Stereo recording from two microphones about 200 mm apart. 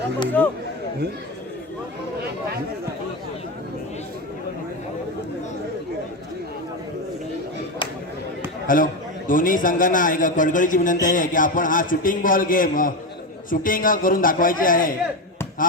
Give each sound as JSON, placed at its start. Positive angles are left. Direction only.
{"t": 0.4, "sound": "speech", "side_deg": 5}
{"t": 8.6, "sound": "a man's voice", "side_deg": 45}